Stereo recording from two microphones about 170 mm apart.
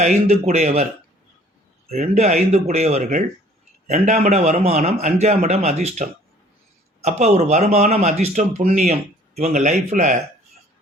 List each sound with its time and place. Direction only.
0.0 s speech: 40° right (ahead or behind)
1.9 s speech: 40° right (ahead or behind)